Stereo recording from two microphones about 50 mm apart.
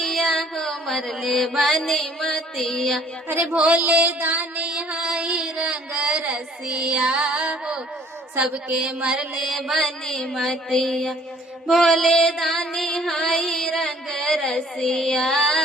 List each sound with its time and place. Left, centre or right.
0.0 s mantra: centre
3.5 s mantra: right
4.6 s music: right
8.4 s a woman's voice: centre
9.0 s music: right
9.3 s mantra: centre
12.1 s music: centre